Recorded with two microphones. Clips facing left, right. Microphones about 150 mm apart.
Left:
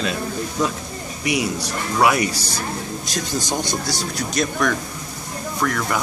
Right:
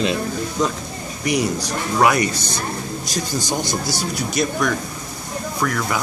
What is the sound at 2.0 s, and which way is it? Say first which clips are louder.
Speech: right 1 dB; 5° left (ahead or behind).